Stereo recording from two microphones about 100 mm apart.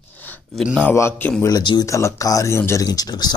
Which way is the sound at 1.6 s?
50° left (ahead or behind).